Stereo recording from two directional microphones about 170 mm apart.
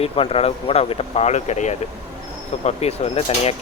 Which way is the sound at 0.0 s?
35° left (ahead or behind).